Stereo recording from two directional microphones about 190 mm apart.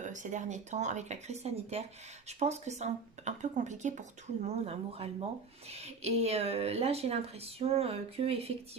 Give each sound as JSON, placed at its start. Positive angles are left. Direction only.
{"t": 0.0, "sound": "speech", "side_deg": -40}